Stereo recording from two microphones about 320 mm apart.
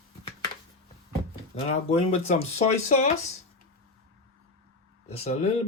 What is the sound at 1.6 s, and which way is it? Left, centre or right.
Speech, centre.